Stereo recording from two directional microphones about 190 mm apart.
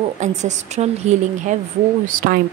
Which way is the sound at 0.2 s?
40° right (ahead or behind).